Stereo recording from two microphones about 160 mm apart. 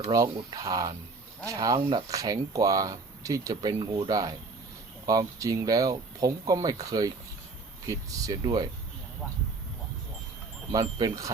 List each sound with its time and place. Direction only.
0.1 s speech: 20° right (ahead or behind)
10.7 s speech: 25° right (ahead or behind)